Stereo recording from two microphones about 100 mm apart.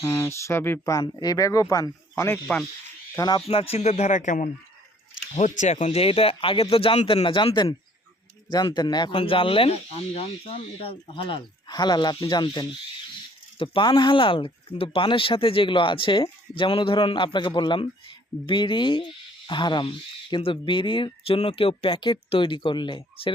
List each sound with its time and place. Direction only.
0.0 s speech: 30° left (ahead or behind)
1.0 s speech: 40° left (ahead or behind); by 2.6 s 25° left (ahead or behind)
3.2 s speech: 45° left (ahead or behind)
3.4 s speech: 85° left
5.8 s speech: 90° left; by 9.1 s 45° left (ahead or behind)
9.1 s speech: 65° left (ahead or behind)
11.7 s speech: 45° left (ahead or behind)
13.6 s speech: 55° left (ahead or behind); by 22.0 s 75° left (ahead or behind)
22.3 s speech: 55° left (ahead or behind)